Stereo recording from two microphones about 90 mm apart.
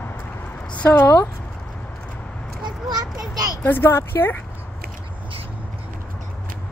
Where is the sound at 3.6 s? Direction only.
25° left (ahead or behind).